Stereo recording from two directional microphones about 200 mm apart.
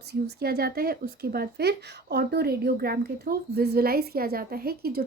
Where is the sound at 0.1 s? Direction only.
55° right (ahead or behind).